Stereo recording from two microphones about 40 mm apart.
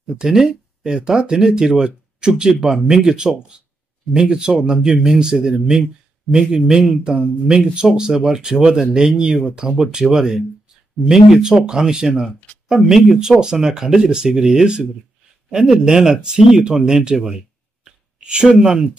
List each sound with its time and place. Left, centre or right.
0.1 s speech: centre
18.2 s speech: right